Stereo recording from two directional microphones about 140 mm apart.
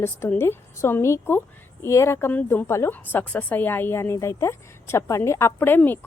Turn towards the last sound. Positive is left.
turn(degrees=15)  # may be behind; listen again after turning